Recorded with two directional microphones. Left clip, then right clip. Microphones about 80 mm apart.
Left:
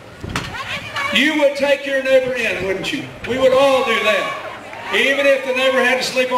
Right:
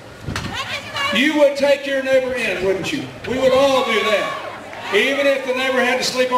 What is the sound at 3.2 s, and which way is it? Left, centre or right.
Speech, left.